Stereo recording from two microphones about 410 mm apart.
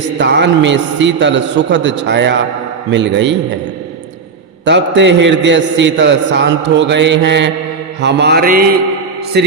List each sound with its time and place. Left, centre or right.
0.2 s a man's voice: right
4.6 s a man's voice: right